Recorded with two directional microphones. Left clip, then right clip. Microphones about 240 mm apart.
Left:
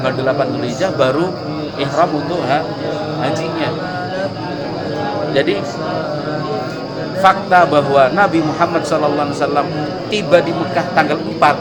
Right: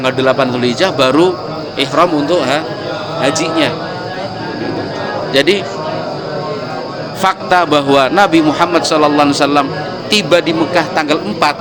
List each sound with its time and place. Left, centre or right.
0.0 s a man's voice: right
5.3 s speech: right
7.2 s a man's voice: right